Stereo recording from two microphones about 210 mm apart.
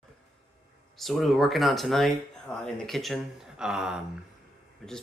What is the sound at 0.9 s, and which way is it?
Speech, centre (ahead or behind).